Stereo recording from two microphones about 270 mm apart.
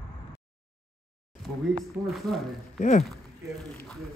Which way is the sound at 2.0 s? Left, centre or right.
Centre.